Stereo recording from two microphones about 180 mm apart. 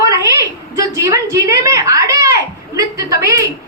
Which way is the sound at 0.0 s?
20° right (ahead or behind).